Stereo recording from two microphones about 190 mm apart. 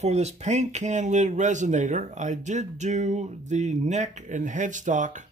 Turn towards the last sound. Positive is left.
turn(degrees=-40)  # may be behind; listen again after turning